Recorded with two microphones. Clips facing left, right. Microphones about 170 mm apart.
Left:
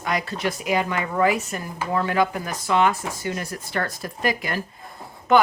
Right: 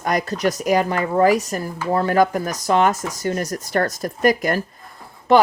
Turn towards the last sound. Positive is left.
turn(degrees=-35)  # may be behind; listen again after turning